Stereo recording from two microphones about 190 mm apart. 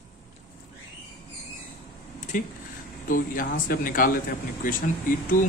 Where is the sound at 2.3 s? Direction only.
45° left (ahead or behind).